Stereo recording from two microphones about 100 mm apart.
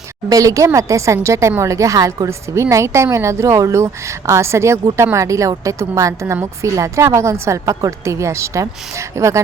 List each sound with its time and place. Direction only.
0.3 s speech: 35° right (ahead or behind)